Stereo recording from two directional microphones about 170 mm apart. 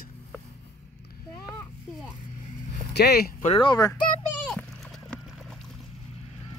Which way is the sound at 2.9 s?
70° left (ahead or behind).